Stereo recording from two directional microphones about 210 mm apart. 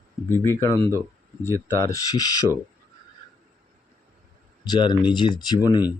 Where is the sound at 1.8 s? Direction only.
15° left (ahead or behind).